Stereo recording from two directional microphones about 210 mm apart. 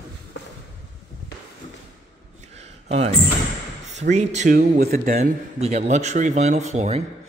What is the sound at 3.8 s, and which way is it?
A man's voice, 35° right (ahead or behind).